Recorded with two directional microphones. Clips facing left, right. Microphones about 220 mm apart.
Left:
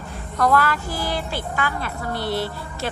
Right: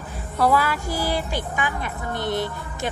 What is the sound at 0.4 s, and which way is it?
A woman's voice, 10° right (ahead or behind).